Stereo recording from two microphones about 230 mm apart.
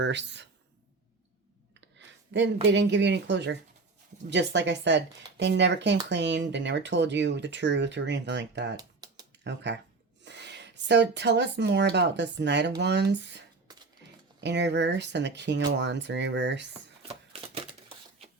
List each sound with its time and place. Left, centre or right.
0.0 s speech: right
1.8 s a sound: right
2.6 s speech: right
8.7 s typing: centre
9.4 s speech: right
14.4 s speech: right
17.5 s a sound: right